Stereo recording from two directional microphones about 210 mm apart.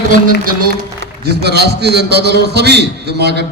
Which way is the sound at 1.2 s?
50° right (ahead or behind).